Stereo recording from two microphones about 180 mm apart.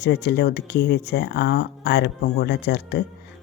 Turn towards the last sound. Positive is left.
turn(degrees=65)  # may be behind; listen again after turning